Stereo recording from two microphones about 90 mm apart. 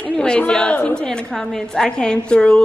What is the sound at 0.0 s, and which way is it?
A woman's voice, 10° left (ahead or behind).